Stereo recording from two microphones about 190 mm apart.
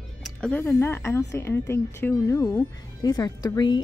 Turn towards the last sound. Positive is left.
turn(degrees=20)  # may be behind; listen again after turning